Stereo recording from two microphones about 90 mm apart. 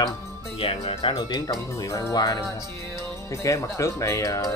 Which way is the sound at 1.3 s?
40° left (ahead or behind).